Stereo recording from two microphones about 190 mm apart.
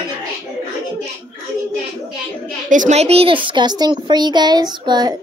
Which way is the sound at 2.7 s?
40° right (ahead or behind).